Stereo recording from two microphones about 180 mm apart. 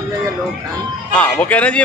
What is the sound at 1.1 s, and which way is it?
Speech, 5° left (ahead or behind).